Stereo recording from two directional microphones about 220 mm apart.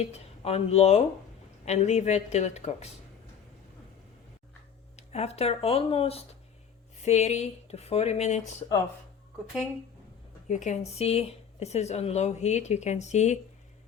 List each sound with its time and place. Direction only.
0.0 s speech: 30° left (ahead or behind)
4.9 s speech: 30° left (ahead or behind)
10.5 s speech: 35° left (ahead or behind)